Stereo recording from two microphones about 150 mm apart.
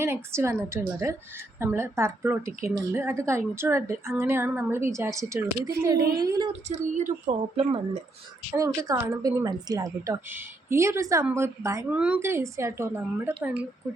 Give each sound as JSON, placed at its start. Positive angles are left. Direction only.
{"t": 0.0, "sound": "a woman's voice", "side_deg": -15}
{"t": 6.7, "sound": "a woman's voice", "side_deg": -55}
{"t": 7.5, "sound": "speech", "side_deg": -45}
{"t": 8.5, "sound": "a woman's voice", "side_deg": -20}
{"t": 11.9, "sound": "a woman's voice", "side_deg": -10}